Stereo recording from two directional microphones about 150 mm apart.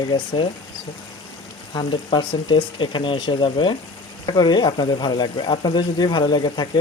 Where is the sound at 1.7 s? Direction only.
30° left (ahead or behind).